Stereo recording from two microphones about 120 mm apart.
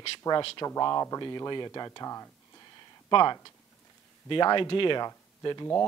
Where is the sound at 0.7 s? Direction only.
25° left (ahead or behind).